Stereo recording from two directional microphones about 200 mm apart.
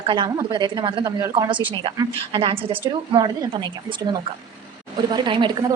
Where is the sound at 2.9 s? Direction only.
20° right (ahead or behind).